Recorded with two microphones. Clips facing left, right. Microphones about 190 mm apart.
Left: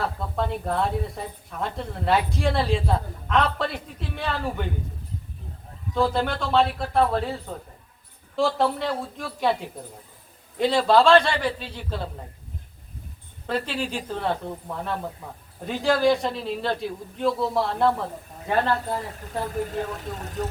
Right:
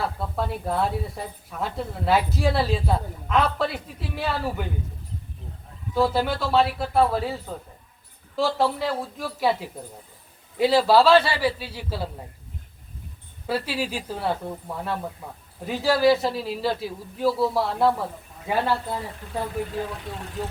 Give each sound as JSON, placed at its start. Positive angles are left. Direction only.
{"t": 0.3, "sound": "a woman's voice", "side_deg": -5}
{"t": 5.9, "sound": "a woman's voice", "side_deg": -5}
{"t": 13.5, "sound": "a woman's voice", "side_deg": -10}
{"t": 19.7, "sound": "speech", "side_deg": 45}